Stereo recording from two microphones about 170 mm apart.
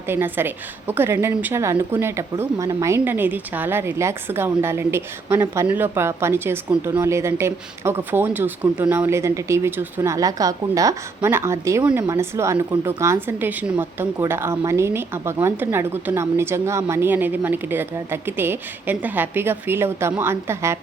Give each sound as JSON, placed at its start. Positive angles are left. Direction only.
{"t": 0.1, "sound": "speech", "side_deg": -10}